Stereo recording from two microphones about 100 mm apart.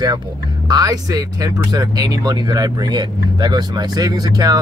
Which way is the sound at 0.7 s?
40° right (ahead or behind).